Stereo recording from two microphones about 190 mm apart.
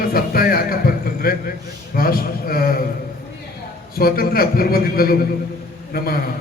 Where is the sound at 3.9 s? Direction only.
50° left (ahead or behind).